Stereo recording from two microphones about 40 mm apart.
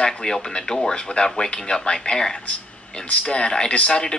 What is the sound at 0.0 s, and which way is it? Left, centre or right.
Speech, centre.